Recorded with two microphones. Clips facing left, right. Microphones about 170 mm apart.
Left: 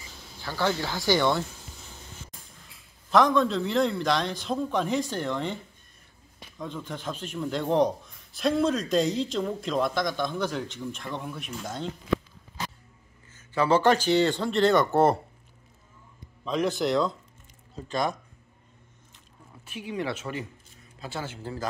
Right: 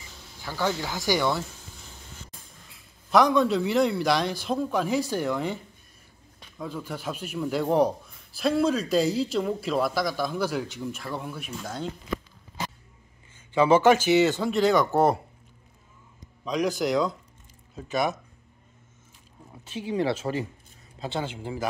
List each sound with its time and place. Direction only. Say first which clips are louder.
0.4 s a man's voice: left 1 dB; 15° right (ahead or behind)
3.1 s a man's voice: right 1 dB; 5° right (ahead or behind)
6.6 s a man's voice: right 1 dB; 5° right (ahead or behind)
13.5 s a man's voice: right 3 dB; 15° right (ahead or behind); by 15.1 s centre (ahead or behind)
16.4 s a man's voice: even; centre (ahead or behind)
19.7 s speech: right 5 dB; 30° right (ahead or behind)
21.0 s a man's voice: right 4 dB; 20° right (ahead or behind)